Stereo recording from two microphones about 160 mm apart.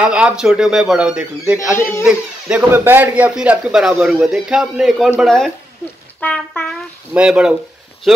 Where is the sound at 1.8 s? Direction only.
15° left (ahead or behind).